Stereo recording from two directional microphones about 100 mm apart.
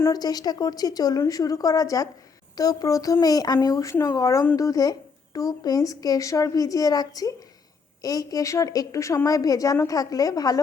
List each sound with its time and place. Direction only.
0.1 s speech: 40° left (ahead or behind)